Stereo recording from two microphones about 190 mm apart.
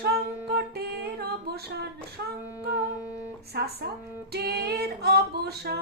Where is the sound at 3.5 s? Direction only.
55° right (ahead or behind).